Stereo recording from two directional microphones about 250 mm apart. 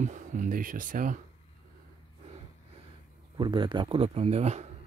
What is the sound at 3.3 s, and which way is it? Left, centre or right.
Speech, centre.